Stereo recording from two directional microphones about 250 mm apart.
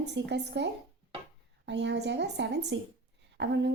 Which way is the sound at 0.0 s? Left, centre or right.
Right.